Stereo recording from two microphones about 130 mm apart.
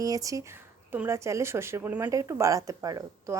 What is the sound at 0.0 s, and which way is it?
A woman's voice, 25° right (ahead or behind).